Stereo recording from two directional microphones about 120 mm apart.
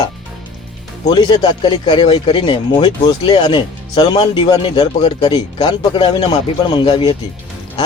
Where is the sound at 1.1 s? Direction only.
35° left (ahead or behind).